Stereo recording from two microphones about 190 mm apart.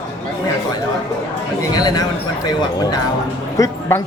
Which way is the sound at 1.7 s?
20° left (ahead or behind).